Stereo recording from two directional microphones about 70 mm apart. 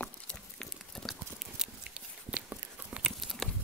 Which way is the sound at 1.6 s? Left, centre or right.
Centre.